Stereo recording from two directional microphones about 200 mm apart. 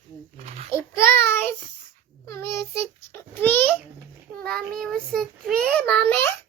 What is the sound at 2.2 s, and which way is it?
Child singing, 15° left (ahead or behind).